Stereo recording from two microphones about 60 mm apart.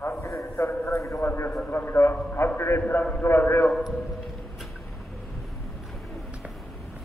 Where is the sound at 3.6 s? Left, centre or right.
Centre.